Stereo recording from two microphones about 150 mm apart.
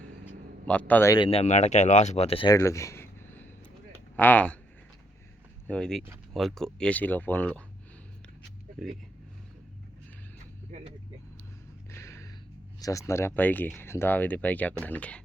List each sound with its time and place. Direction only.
0.7 s speech: 10° left (ahead or behind)
1.1 s speech: 35° left (ahead or behind)
2.5 s a sound: 20° left (ahead or behind)
5.6 s speech: 5° left (ahead or behind)
8.8 s speech: centre (ahead or behind)
10.7 s vehicle: 50° right (ahead or behind)
11.9 s a sound: 20° left (ahead or behind)
12.8 s speech: 20° left (ahead or behind)